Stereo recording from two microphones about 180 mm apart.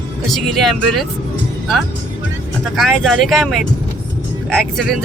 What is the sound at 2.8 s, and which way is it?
Speech, centre (ahead or behind).